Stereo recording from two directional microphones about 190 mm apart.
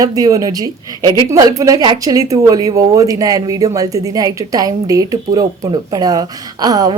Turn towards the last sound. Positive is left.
turn(degrees=-20)  # may be behind; listen again after turning